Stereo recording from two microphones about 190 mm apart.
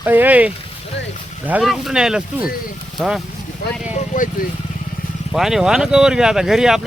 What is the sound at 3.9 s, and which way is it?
Speech, 40° left (ahead or behind).